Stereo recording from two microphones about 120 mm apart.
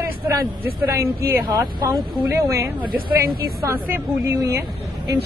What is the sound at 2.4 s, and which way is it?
Speech, 25° right (ahead or behind).